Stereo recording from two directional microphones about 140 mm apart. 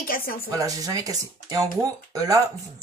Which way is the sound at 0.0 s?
90° left.